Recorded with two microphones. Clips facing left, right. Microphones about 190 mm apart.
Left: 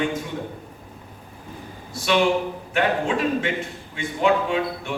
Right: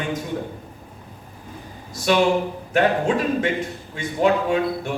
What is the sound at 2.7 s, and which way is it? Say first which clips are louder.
Speech: right 4 dB; 40° right (ahead or behind).